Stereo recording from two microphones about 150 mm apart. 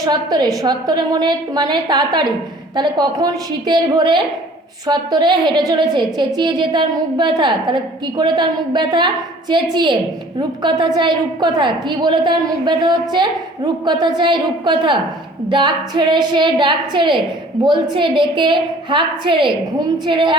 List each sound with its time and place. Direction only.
0.0 s a woman's voice: 25° right (ahead or behind)